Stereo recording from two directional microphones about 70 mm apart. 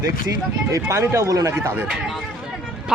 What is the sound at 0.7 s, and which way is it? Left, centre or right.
Speech, right.